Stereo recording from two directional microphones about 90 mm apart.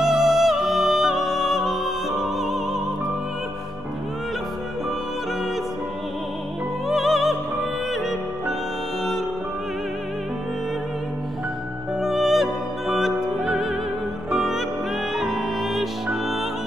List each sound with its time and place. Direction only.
0.0 s music: 5° right (ahead or behind)
6.9 s music: centre (ahead or behind)
12.0 s music: 5° right (ahead or behind)